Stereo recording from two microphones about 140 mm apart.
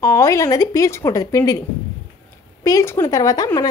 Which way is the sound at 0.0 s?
20° left (ahead or behind).